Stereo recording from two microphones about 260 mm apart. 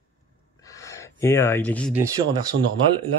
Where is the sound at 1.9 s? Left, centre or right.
Centre.